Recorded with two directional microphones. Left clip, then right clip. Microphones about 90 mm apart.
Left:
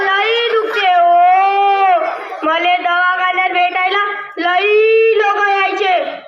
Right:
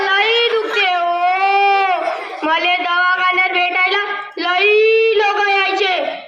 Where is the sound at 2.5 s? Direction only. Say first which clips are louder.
Left 2 dB; 20° right (ahead or behind).